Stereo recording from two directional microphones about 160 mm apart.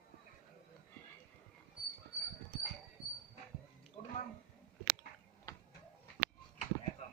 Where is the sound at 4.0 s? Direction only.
50° left (ahead or behind).